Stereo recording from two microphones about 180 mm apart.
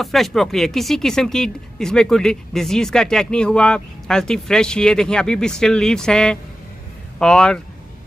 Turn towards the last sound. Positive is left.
turn(degrees=5)  # may be behind; listen again after turning